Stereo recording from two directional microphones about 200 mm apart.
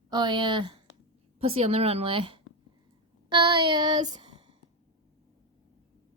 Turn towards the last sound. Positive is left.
turn(degrees=-25)  # may be behind; listen again after turning